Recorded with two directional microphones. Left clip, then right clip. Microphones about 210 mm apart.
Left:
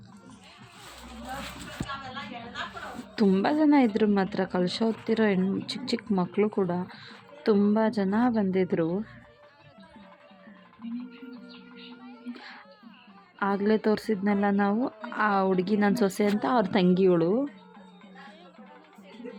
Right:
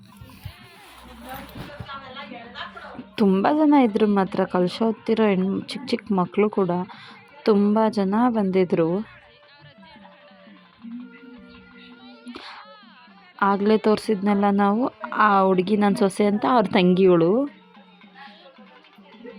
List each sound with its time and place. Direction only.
3.2 s a woman's voice: 10° right (ahead or behind)
12.3 s a sound: 15° right (ahead or behind)
13.4 s a woman's voice: 15° right (ahead or behind)